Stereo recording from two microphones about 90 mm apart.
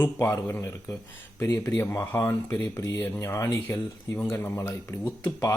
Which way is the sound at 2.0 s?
40° left (ahead or behind).